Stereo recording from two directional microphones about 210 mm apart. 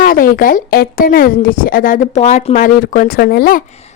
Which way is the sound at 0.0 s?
45° left (ahead or behind).